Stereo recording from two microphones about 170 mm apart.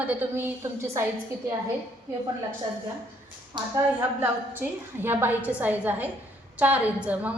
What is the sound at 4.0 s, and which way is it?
A woman's voice, 10° right (ahead or behind).